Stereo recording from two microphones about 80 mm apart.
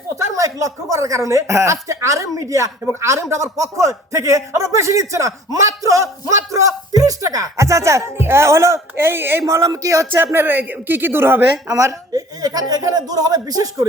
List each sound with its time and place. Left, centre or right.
0.2 s a man's voice: right
9.5 s speech: right
10.3 s speech: right
11.7 s speech: right